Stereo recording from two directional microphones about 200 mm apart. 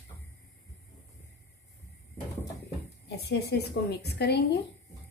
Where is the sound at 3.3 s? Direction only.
55° left (ahead or behind).